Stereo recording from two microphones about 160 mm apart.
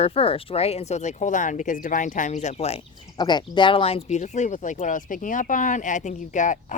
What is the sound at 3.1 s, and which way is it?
Speech, 25° left (ahead or behind).